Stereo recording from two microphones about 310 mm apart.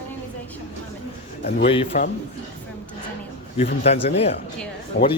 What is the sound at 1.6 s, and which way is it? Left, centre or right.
Speech, centre.